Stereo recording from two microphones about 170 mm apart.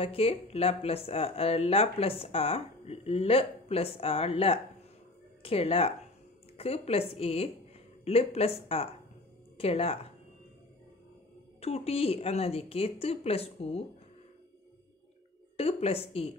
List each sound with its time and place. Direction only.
0.0 s speech: 35° left (ahead or behind)
11.6 s speech: 35° left (ahead or behind)
15.5 s speech: 35° left (ahead or behind)